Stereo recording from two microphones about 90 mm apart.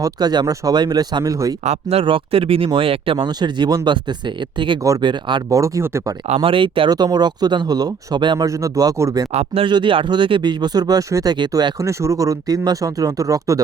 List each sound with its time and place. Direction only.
0.0 s speech: 50° right (ahead or behind)
1.9 s speech: 85° right
3.2 s speech: 55° right (ahead or behind)
5.5 s speech: 35° right (ahead or behind)
6.4 s speech: 80° right
6.9 s speech: 50° right (ahead or behind)
8.4 s speech: 40° right (ahead or behind)
9.6 s speech: 65° right (ahead or behind)
11.8 s speech: 35° right (ahead or behind)